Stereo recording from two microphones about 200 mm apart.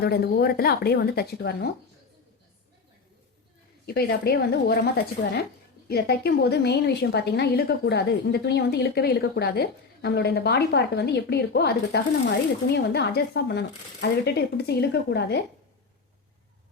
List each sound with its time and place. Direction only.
0.0 s speech: 55° left (ahead or behind)
3.8 s a woman's voice: 50° left (ahead or behind)